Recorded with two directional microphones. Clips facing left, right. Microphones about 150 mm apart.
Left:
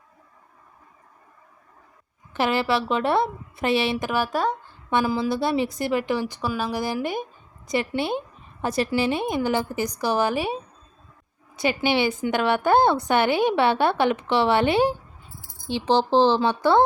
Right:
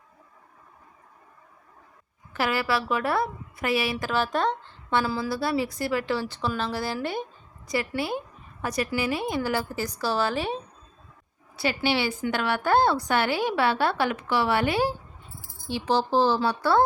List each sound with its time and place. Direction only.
2.3 s a woman's voice: 25° left (ahead or behind)
4.1 s a woman's voice: 10° left (ahead or behind)